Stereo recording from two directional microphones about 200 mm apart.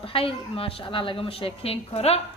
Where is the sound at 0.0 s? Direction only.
25° left (ahead or behind).